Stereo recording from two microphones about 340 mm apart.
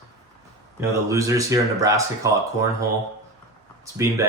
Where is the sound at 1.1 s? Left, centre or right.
Centre.